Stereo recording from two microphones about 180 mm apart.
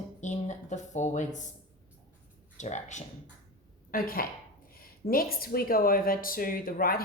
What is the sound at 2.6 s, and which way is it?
Speech, 40° left (ahead or behind).